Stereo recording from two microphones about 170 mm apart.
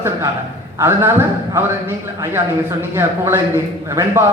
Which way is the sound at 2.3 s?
15° right (ahead or behind).